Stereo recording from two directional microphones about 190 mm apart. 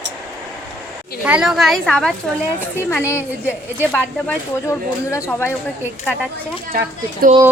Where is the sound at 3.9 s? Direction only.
10° left (ahead or behind).